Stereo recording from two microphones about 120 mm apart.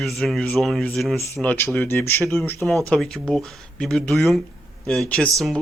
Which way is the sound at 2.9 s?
5° left (ahead or behind).